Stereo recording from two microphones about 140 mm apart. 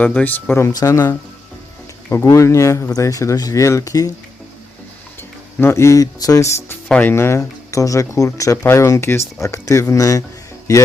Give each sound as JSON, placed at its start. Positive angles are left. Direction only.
{"t": 0.0, "sound": "speech", "side_deg": 10}
{"t": 5.5, "sound": "speech", "side_deg": 20}
{"t": 6.8, "sound": "speech", "side_deg": 10}